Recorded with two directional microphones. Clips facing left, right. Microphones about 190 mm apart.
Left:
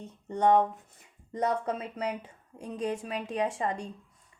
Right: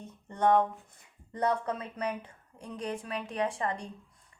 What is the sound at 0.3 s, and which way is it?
A woman's voice, 15° left (ahead or behind).